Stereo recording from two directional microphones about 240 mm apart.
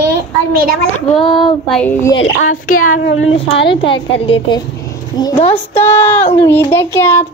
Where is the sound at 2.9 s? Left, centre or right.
Left.